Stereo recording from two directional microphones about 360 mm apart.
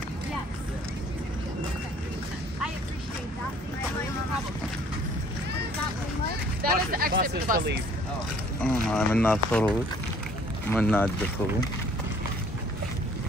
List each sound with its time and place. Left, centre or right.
6.2 s a sound: right
8.8 s speech: centre
10.7 s speech: centre